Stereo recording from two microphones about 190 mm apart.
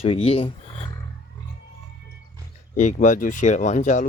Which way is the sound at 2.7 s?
40° left (ahead or behind).